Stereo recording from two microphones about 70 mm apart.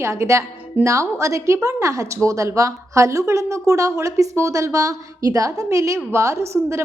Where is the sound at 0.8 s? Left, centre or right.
Right.